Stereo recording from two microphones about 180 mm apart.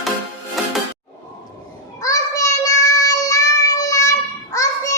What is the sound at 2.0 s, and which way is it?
Child singing, 20° left (ahead or behind).